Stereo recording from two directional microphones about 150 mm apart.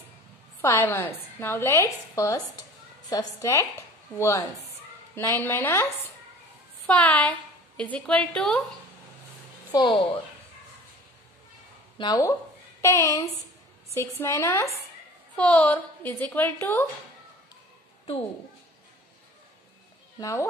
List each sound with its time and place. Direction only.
0.6 s a woman's voice: 15° left (ahead or behind)
6.9 s a woman's voice: 10° left (ahead or behind)
9.7 s a woman's voice: 30° left (ahead or behind)
12.0 s a woman's voice: 25° left (ahead or behind)
20.2 s speech: 20° left (ahead or behind)